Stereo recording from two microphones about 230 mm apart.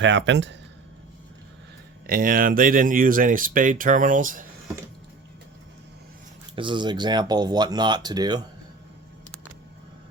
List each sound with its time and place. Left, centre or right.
0.0 s speech: right
2.0 s speech: right
6.6 s speech: right